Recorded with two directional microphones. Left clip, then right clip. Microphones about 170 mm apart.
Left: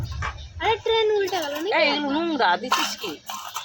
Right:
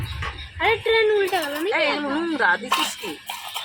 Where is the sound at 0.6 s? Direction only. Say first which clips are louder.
Right 2 dB; 45° right (ahead or behind).